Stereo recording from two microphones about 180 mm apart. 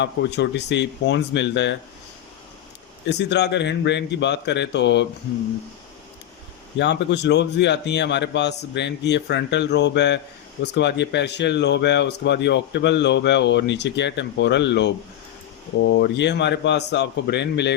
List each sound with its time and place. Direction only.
0.0 s speech: 75° left (ahead or behind)
3.1 s speech: 70° left (ahead or behind)
6.7 s speech: 75° left (ahead or behind)